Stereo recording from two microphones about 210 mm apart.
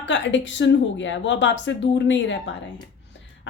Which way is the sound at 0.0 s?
60° left (ahead or behind).